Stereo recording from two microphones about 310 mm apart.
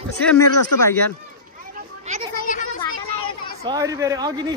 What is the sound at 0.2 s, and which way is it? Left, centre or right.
Speech, centre.